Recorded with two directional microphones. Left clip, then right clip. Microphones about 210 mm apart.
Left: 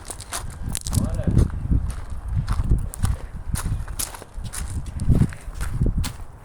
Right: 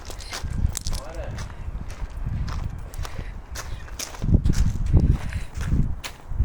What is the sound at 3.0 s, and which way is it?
Clip-clop, 60° left (ahead or behind).